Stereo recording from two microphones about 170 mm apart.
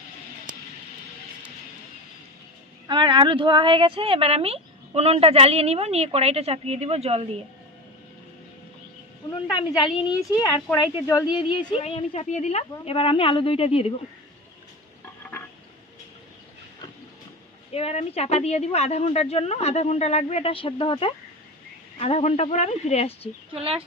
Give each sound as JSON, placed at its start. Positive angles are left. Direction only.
{"t": 0.5, "sound": "vehicle", "side_deg": -55}
{"t": 2.8, "sound": "speech", "side_deg": -25}
{"t": 9.5, "sound": "speech", "side_deg": 25}
{"t": 17.7, "sound": "speech", "side_deg": 35}
{"t": 23.6, "sound": "speech", "side_deg": -35}